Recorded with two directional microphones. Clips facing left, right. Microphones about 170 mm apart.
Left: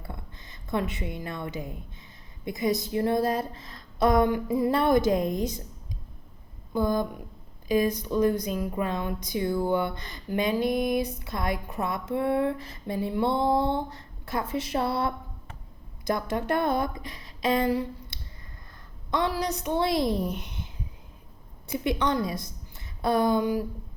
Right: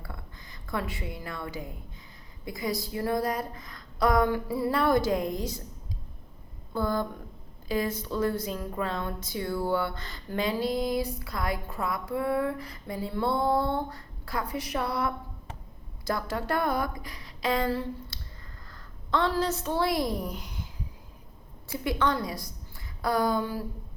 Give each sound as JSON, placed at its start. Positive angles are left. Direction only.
{"t": 0.7, "sound": "speech", "side_deg": 20}
{"t": 6.7, "sound": "a woman's voice", "side_deg": 15}